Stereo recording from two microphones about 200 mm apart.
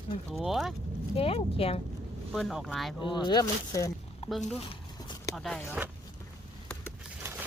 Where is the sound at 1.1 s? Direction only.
30° left (ahead or behind).